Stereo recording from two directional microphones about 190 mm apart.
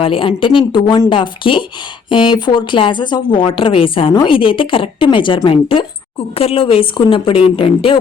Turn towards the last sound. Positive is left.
turn(degrees=30)  # may be behind; listen again after turning